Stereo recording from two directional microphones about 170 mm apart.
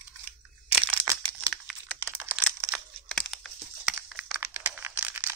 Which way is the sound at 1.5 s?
Centre (ahead or behind).